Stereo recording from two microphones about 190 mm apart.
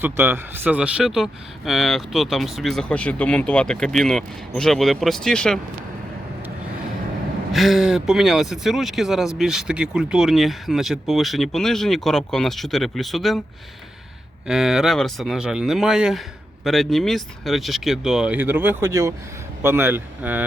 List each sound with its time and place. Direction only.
0.0 s speech: 10° right (ahead or behind); by 5.5 s 5° left (ahead or behind)
7.5 s speech: centre (ahead or behind)
14.4 s speech: centre (ahead or behind)